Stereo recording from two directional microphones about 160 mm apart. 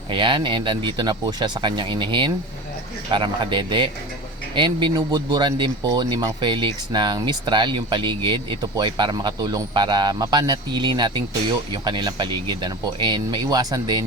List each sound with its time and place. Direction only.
0.1 s speech: 30° right (ahead or behind)